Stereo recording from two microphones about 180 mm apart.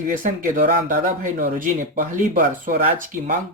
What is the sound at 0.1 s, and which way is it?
Speech, 50° right (ahead or behind).